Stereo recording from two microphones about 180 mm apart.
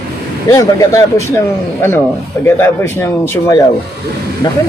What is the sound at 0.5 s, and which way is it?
Speech, 20° left (ahead or behind).